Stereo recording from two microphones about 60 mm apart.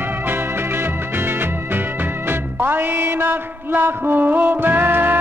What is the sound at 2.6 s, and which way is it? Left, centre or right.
Music, right.